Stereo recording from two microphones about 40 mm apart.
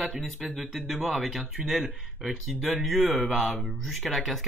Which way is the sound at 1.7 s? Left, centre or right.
Centre.